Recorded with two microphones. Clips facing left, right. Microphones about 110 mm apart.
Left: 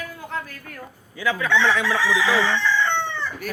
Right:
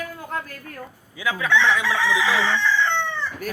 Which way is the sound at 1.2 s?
10° right (ahead or behind).